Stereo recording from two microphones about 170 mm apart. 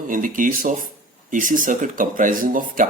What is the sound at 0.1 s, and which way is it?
Speech, 50° right (ahead or behind).